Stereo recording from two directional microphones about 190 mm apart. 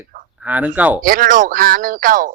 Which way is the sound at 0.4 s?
10° right (ahead or behind).